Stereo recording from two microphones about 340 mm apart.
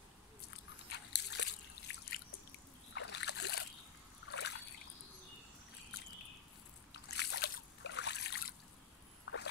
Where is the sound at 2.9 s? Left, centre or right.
Left.